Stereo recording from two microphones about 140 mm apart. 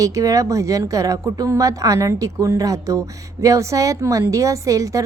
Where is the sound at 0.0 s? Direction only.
25° right (ahead or behind).